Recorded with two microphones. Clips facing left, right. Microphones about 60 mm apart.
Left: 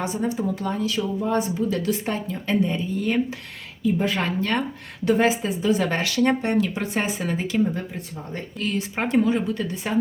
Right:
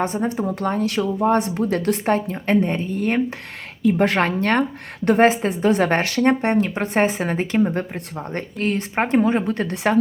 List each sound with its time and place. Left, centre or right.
0.0 s speech: right
3.8 s speech: right
8.6 s speech: right
9.6 s speech: right